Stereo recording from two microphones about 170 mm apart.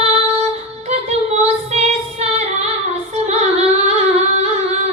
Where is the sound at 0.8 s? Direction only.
40° right (ahead or behind).